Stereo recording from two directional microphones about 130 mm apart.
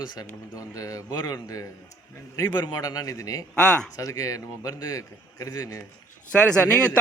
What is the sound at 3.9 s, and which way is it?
A man's voice, 25° left (ahead or behind).